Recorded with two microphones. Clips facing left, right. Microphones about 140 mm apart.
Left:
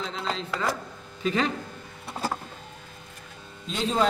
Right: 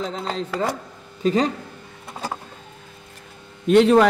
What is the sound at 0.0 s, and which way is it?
Speech, 40° right (ahead or behind).